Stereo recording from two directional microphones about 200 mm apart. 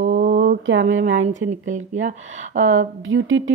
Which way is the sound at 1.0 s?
40° right (ahead or behind).